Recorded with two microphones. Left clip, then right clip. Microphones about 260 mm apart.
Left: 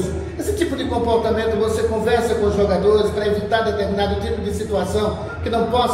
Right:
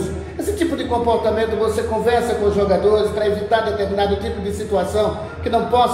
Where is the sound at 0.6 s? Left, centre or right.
Right.